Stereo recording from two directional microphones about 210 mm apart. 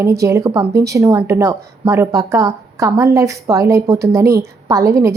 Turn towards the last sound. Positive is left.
turn(degrees=-15)  # may be behind; listen again after turning